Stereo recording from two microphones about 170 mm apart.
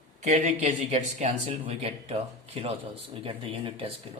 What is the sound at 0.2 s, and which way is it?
Speech, 45° right (ahead or behind).